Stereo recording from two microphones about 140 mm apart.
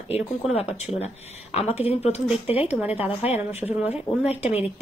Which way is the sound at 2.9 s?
45° left (ahead or behind).